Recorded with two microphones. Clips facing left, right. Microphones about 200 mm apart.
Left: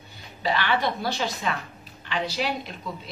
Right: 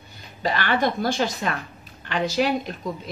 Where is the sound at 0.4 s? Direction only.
45° right (ahead or behind).